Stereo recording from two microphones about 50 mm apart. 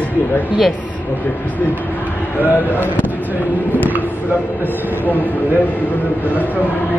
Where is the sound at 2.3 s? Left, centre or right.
Left.